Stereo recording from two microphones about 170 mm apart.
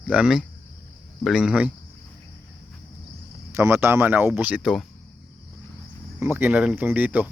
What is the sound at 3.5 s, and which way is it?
Speech, 15° right (ahead or behind).